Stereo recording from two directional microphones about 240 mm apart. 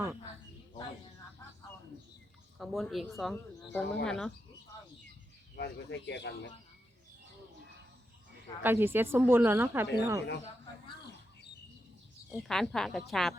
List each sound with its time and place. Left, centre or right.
2.6 s speech: centre
5.5 s speech: left
8.6 s speech: centre
12.4 s speech: centre